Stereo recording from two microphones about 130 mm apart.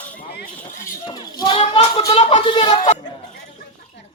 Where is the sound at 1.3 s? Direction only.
35° left (ahead or behind).